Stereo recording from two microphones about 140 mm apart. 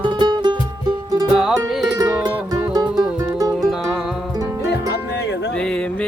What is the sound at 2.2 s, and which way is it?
Music, 25° right (ahead or behind).